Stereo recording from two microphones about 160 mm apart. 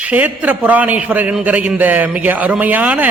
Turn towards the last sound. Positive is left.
turn(degrees=-10)  # may be behind; listen again after turning